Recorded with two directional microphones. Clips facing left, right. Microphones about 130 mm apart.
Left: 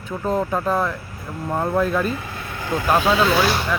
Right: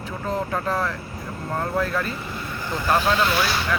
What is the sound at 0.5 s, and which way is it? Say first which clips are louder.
Speech: left 3 dB; 15° left (ahead or behind).